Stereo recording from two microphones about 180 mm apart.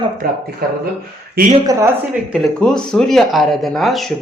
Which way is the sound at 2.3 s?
5° left (ahead or behind).